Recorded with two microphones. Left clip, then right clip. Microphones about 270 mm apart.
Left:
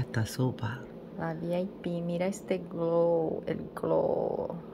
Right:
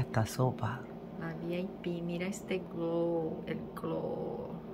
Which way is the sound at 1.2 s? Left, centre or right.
Centre.